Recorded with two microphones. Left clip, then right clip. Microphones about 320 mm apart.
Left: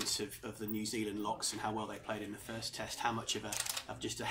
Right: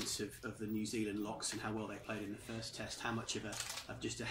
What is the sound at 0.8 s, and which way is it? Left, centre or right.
Speech, left.